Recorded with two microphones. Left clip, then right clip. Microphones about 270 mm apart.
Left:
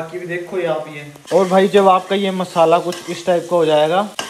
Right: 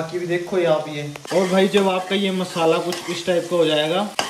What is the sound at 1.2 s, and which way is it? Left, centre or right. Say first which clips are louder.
Frying: left 5 dB; centre.